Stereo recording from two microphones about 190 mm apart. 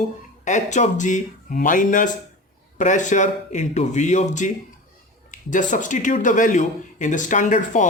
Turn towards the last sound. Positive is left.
turn(degrees=40)  # may be behind; listen again after turning